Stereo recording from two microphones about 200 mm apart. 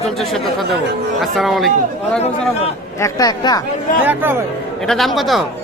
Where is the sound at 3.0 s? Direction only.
20° left (ahead or behind).